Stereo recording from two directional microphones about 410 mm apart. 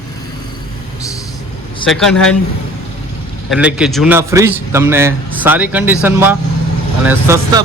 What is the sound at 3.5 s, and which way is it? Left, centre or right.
A man's voice, centre.